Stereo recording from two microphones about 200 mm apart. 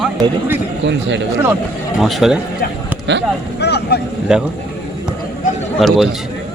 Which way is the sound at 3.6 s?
55° left (ahead or behind).